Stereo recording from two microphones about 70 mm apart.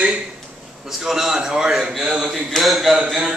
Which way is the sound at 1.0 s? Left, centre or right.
Centre.